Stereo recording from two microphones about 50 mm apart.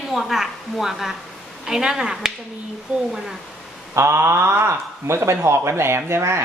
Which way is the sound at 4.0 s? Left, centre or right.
Right.